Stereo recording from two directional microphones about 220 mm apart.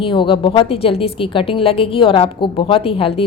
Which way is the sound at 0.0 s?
25° left (ahead or behind).